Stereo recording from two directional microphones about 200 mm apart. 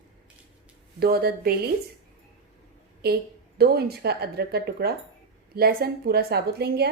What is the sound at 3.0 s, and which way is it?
A woman's voice, 50° right (ahead or behind).